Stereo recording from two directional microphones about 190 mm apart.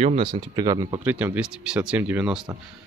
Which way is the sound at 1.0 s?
10° right (ahead or behind).